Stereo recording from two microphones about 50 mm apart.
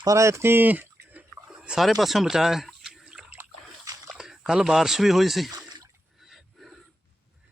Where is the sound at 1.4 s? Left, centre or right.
Centre.